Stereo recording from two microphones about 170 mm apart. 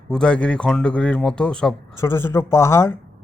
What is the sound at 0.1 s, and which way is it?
Speech, 5° left (ahead or behind).